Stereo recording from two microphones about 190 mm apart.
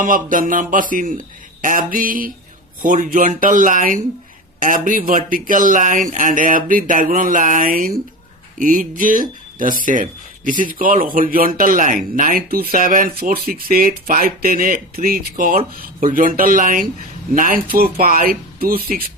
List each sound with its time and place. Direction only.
0.0 s speech: 45° right (ahead or behind)